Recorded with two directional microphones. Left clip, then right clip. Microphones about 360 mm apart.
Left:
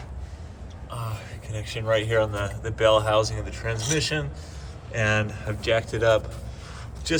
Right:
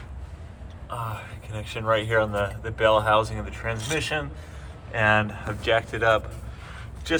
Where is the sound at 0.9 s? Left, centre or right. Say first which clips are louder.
Right 4 dB; centre.